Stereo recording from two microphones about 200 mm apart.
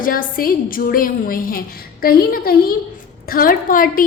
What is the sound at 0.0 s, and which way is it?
A woman's voice, 45° left (ahead or behind).